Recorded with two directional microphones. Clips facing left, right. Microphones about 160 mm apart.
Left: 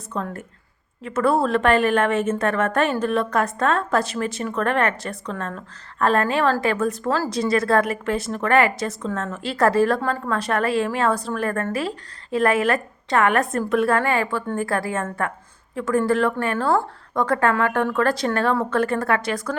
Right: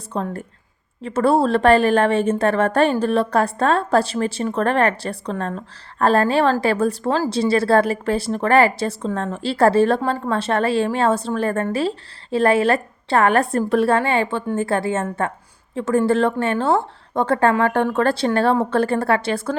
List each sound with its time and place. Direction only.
0.1 s a woman's voice: 30° right (ahead or behind)